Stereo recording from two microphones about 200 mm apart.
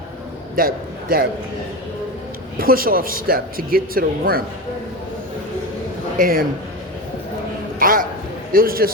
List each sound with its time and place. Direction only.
0.5 s a man's voice: 45° right (ahead or behind)
2.6 s a man's voice: 45° right (ahead or behind)
6.1 s a man's voice: 45° right (ahead or behind)
7.8 s a sound: 45° right (ahead or behind)
8.5 s a man's voice: 45° right (ahead or behind)